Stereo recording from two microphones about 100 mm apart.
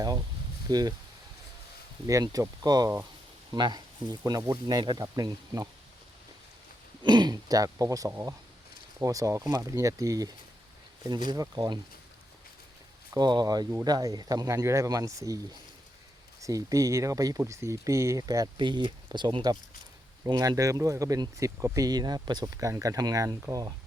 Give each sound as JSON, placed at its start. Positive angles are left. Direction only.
{"t": 0.7, "sound": "speech", "side_deg": -40}
{"t": 2.0, "sound": "speech", "side_deg": -35}
{"t": 4.8, "sound": "speech", "side_deg": -50}
{"t": 5.0, "sound": "speech", "side_deg": -40}
{"t": 7.0, "sound": "speech", "side_deg": -45}
{"t": 13.1, "sound": "speech", "side_deg": -45}
{"t": 16.4, "sound": "speech", "side_deg": -35}
{"t": 18.5, "sound": "speech", "side_deg": -50}
{"t": 20.2, "sound": "speech", "side_deg": -40}